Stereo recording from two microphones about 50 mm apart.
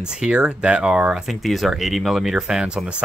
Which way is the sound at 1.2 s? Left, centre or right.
Centre.